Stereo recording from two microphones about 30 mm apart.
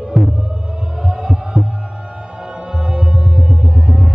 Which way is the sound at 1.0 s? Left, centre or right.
Right.